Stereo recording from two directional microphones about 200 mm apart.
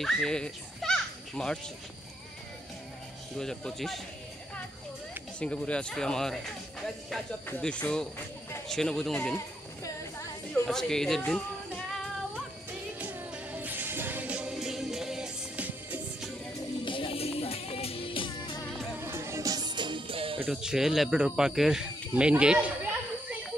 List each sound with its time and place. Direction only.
0.0 s a child's voice: 5° left (ahead or behind)
3.3 s speech: 5° left (ahead or behind)
5.4 s speech: 5° left (ahead or behind)
10.5 s speech: 5° left (ahead or behind)
13.0 s music: 10° right (ahead or behind)
16.8 s music: 25° left (ahead or behind)
18.7 s music: centre (ahead or behind)
18.9 s music: 10° right (ahead or behind)
20.4 s speech: 5° right (ahead or behind)